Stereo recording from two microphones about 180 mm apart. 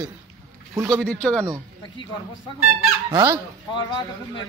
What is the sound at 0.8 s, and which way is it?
Speech, 5° left (ahead or behind).